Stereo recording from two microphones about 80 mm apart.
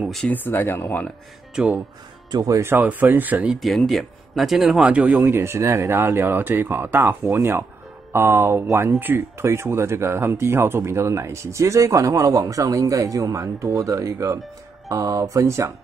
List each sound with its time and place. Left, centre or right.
0.3 s speech: left
1.5 s speech: centre
2.3 s speech: right
2.6 s speech: right
3.5 s speech: centre; by 15.7 s right